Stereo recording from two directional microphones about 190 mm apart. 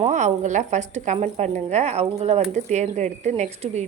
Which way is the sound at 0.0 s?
35° right (ahead or behind).